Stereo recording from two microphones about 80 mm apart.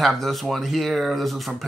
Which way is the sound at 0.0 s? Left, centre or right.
Centre.